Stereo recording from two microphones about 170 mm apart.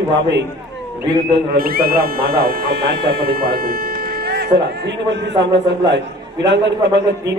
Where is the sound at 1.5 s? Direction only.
60° right (ahead or behind).